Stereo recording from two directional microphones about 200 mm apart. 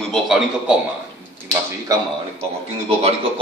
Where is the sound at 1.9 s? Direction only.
15° right (ahead or behind).